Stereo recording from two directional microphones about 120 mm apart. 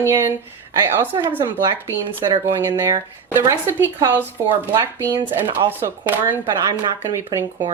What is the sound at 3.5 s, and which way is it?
Speech, 20° right (ahead or behind).